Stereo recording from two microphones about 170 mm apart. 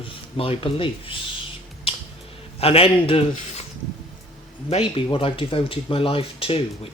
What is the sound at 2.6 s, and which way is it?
Speech, 35° left (ahead or behind).